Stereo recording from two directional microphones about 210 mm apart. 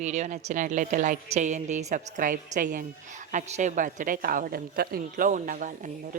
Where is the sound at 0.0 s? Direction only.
35° right (ahead or behind).